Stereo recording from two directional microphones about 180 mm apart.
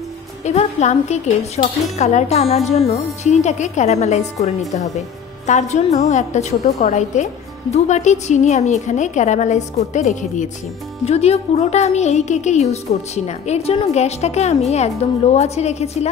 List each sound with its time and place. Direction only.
0.4 s a woman's voice: 40° left (ahead or behind)